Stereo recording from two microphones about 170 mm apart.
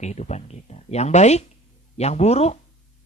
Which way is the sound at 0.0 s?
40° left (ahead or behind).